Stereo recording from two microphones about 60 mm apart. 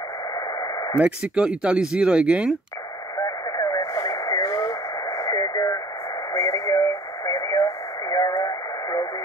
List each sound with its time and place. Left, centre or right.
0.6 s radio: left
1.2 s speech: centre
3.2 s radio: left
6.3 s radio: left